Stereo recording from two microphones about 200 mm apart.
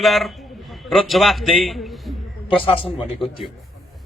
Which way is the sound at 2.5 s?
25° left (ahead or behind).